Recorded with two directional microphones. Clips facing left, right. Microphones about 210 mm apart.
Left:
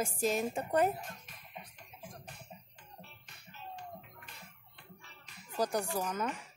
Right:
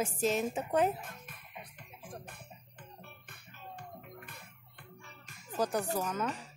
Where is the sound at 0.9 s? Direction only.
55° right (ahead or behind).